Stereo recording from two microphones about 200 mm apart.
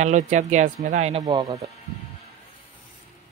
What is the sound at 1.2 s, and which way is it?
Speech, 25° right (ahead or behind).